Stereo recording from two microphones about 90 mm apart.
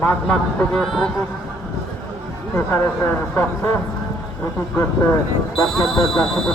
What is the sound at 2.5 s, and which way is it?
Speech, 25° left (ahead or behind).